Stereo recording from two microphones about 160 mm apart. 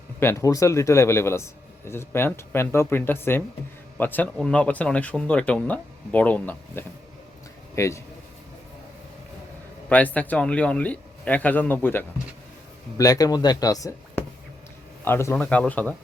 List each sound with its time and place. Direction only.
0.2 s a man's voice: 15° left (ahead or behind)
9.9 s speech: 10° left (ahead or behind)